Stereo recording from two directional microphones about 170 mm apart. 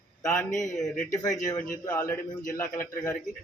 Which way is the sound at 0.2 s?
5° left (ahead or behind).